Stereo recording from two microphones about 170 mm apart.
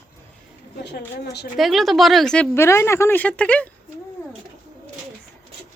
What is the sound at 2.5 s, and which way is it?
Speech, 15° left (ahead or behind).